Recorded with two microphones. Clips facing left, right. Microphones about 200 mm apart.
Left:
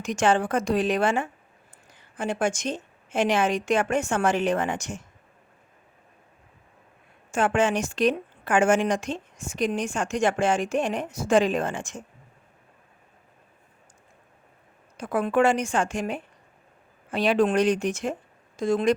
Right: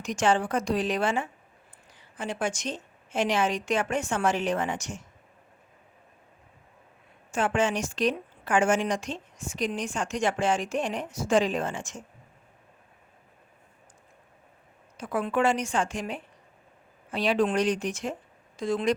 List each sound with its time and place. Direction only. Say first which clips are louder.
0.0 s a woman's voice: left 2 dB; 55° left (ahead or behind)
7.3 s a woman's voice: left 3 dB; 50° left (ahead or behind)
14.9 s a woman's voice: left 4 dB; 50° left (ahead or behind)